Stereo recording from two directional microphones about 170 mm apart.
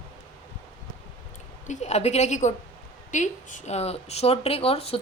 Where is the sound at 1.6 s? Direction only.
45° left (ahead or behind).